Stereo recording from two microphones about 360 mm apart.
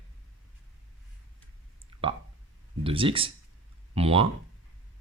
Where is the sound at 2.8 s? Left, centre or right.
Centre.